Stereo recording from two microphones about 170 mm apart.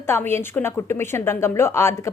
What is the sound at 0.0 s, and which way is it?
A woman's voice, 15° left (ahead or behind).